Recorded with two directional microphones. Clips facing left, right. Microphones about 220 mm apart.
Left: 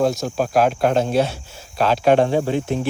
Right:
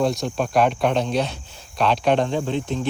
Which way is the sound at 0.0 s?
Centre (ahead or behind).